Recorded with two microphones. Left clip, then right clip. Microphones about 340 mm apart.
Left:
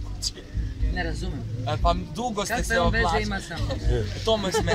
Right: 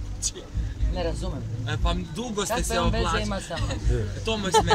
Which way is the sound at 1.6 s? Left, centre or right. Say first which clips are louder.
Left 6 dB; centre.